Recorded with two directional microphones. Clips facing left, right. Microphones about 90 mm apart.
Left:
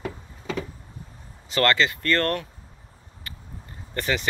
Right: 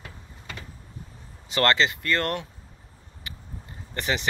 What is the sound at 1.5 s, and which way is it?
Speech, 25° right (ahead or behind).